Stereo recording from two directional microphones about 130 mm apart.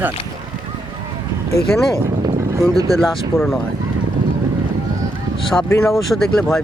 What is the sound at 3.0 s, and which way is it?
Speech, centre (ahead or behind).